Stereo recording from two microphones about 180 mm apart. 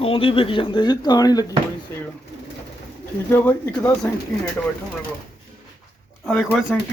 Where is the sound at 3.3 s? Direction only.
10° left (ahead or behind).